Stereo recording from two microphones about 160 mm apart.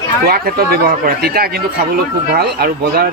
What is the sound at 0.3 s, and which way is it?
Speech, 70° right (ahead or behind).